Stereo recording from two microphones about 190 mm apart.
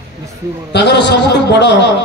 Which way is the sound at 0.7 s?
65° left (ahead or behind).